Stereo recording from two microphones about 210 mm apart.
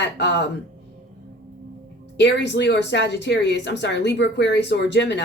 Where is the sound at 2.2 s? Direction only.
55° left (ahead or behind).